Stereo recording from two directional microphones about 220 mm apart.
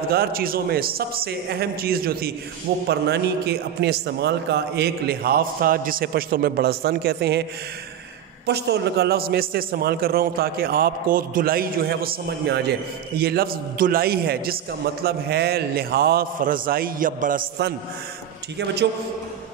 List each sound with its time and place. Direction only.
0.1 s a man's voice: 45° right (ahead or behind)
8.5 s a man's voice: 50° right (ahead or behind)